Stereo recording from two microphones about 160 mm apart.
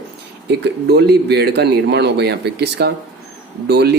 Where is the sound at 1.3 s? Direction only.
90° right.